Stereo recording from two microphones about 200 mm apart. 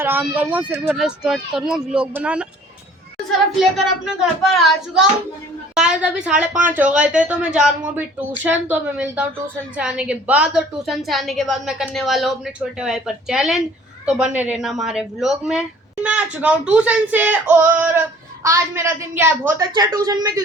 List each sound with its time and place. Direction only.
0.0 s a woman's voice: 10° right (ahead or behind)
3.6 s a woman's voice: centre (ahead or behind)
19.7 s a woman's voice: 20° right (ahead or behind)